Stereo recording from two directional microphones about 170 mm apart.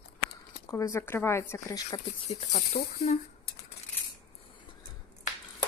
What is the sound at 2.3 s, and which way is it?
Speech, 40° left (ahead or behind).